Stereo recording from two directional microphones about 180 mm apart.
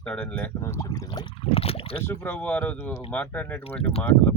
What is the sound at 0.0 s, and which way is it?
Speech, 10° left (ahead or behind).